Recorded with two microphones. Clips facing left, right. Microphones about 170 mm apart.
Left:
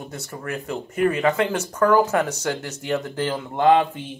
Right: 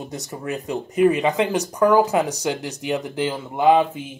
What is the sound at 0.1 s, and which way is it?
Speech, 20° right (ahead or behind).